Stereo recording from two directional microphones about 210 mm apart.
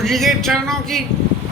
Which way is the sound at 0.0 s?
Centre (ahead or behind).